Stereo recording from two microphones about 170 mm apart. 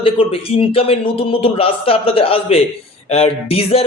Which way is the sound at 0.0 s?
35° left (ahead or behind).